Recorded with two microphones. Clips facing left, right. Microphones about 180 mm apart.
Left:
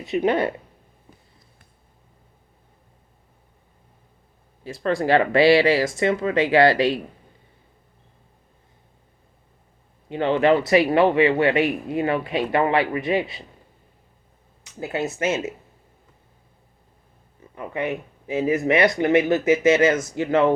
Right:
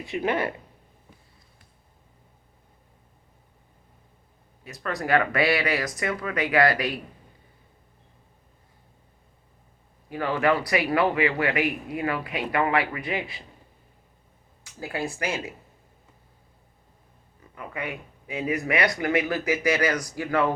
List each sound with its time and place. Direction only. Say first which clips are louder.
0.0 s speech: left 5 dB; 20° left (ahead or behind)
4.6 s speech: left 8 dB; 30° left (ahead or behind)
10.1 s speech: left 5 dB; 25° left (ahead or behind)
14.6 s speech: left 5 dB; 20° left (ahead or behind)
17.5 s speech: left 7 dB; 25° left (ahead or behind)